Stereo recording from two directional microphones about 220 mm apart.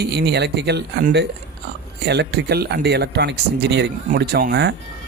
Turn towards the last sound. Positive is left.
turn(degrees=-50)  # may be behind; listen again after turning